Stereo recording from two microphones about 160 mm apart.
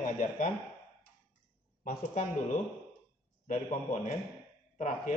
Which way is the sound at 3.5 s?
45° left (ahead or behind).